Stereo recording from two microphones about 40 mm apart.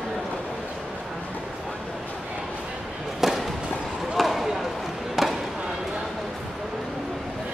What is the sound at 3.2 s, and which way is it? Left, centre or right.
Music, centre.